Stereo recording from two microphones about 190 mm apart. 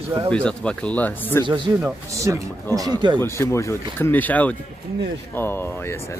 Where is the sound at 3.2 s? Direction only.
15° left (ahead or behind).